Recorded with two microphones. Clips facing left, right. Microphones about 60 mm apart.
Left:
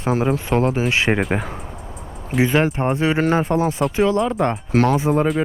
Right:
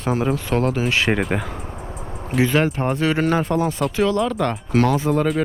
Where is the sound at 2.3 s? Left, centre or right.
Centre.